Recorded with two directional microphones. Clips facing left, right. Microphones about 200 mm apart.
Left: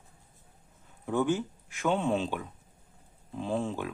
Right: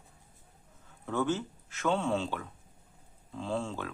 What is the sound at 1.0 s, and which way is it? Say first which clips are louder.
Speech: left 3 dB; 15° left (ahead or behind).